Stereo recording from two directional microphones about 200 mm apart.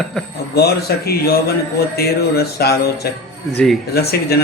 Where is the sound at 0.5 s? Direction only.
50° left (ahead or behind).